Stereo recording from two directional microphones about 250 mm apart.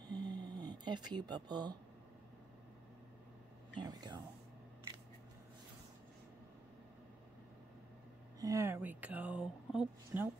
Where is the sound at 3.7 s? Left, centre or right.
Centre.